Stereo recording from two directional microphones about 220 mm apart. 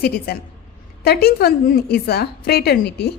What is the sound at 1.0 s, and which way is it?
A woman's voice, 45° left (ahead or behind).